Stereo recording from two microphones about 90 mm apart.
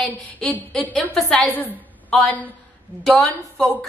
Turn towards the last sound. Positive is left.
turn(degrees=5)  # may be behind; listen again after turning